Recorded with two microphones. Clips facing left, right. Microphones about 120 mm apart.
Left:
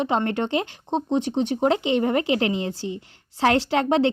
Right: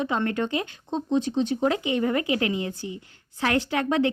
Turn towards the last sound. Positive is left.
turn(degrees=30)  # may be behind; listen again after turning